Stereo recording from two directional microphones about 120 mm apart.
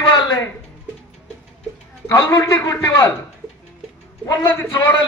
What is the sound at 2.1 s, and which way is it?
Speech, 25° left (ahead or behind).